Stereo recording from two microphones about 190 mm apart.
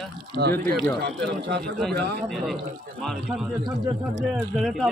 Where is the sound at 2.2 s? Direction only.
Centre (ahead or behind).